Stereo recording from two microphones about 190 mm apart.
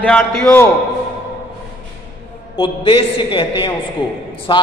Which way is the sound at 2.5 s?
30° left (ahead or behind).